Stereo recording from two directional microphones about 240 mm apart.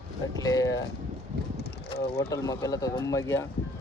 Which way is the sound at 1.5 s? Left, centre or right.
Left.